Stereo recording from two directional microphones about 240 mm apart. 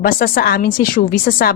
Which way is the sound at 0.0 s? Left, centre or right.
Left.